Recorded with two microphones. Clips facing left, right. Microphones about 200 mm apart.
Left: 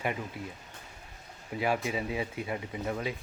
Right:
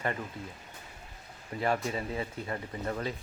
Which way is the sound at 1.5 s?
5° left (ahead or behind).